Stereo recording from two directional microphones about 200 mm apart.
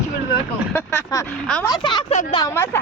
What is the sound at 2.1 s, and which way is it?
Speech, 35° left (ahead or behind).